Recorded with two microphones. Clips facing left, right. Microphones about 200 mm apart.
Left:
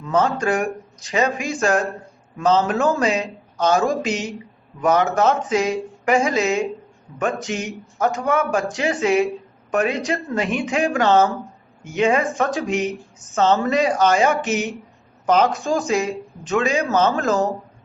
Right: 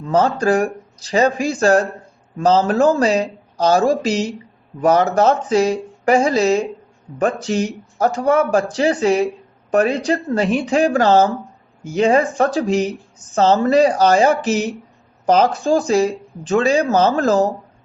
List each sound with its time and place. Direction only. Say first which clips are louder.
0.0 s speech: right 3 dB; 30° right (ahead or behind)